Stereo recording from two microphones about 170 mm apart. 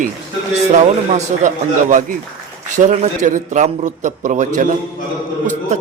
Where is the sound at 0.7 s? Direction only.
45° right (ahead or behind).